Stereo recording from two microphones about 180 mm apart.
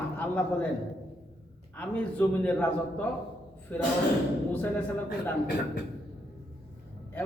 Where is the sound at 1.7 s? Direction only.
5° left (ahead or behind).